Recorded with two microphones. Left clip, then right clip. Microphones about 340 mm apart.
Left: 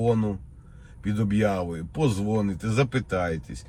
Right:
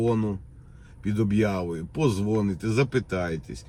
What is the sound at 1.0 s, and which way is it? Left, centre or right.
Speech, centre.